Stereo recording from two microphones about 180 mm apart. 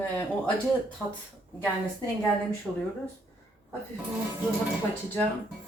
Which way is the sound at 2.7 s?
5° right (ahead or behind).